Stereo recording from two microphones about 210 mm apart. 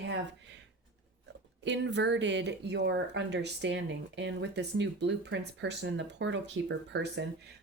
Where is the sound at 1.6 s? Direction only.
55° right (ahead or behind).